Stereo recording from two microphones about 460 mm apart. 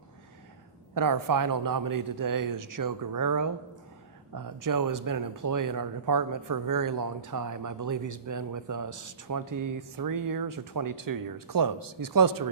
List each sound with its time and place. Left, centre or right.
0.9 s speech: right